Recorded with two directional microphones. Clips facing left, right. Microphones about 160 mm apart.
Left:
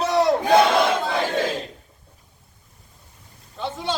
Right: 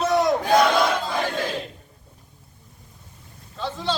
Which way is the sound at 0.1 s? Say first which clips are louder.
Left 3 dB; 30° left (ahead or behind).